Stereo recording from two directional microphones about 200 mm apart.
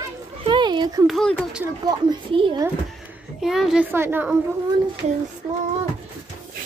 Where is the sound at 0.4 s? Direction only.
25° right (ahead or behind).